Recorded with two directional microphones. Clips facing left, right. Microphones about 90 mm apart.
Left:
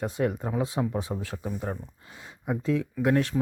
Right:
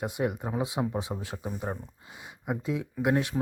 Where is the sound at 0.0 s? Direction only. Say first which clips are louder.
Left 2 dB; 15° right (ahead or behind).